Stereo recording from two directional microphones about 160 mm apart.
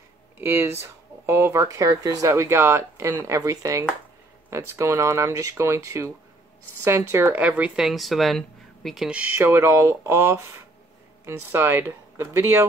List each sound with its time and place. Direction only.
0.4 s speech: 15° right (ahead or behind)
9.4 s speech: 15° right (ahead or behind)